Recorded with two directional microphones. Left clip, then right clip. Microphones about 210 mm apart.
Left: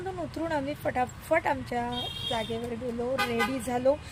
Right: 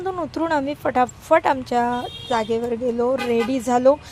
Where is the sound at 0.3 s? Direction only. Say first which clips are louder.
Right 9 dB; 25° right (ahead or behind).